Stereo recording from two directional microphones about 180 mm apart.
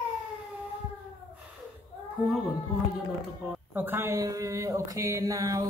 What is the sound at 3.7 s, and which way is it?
Mantra, 10° right (ahead or behind).